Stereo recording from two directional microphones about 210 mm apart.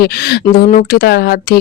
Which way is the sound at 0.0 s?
50° left (ahead or behind).